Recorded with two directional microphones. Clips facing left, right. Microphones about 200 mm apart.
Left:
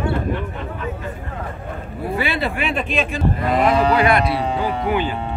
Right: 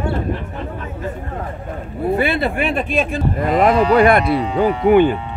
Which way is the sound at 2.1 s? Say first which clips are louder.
Right 4 dB; 50° right (ahead or behind).